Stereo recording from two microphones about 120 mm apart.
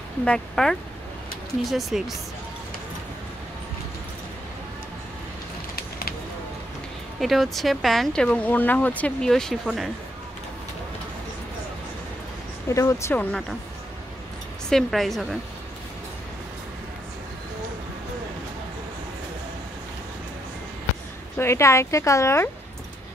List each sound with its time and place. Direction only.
0.2 s speech: 5° left (ahead or behind)
7.2 s speech: centre (ahead or behind)
12.6 s speech: 25° left (ahead or behind)
13.1 s speech: 15° left (ahead or behind)
14.7 s speech: 5° left (ahead or behind)
21.4 s speech: 25° left (ahead or behind)